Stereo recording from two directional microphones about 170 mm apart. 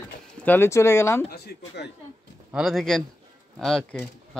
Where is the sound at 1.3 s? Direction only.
75° left (ahead or behind).